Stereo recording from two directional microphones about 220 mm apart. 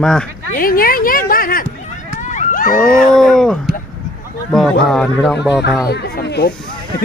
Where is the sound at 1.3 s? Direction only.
40° left (ahead or behind).